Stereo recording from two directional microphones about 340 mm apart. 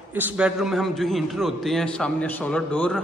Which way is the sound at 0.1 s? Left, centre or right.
Centre.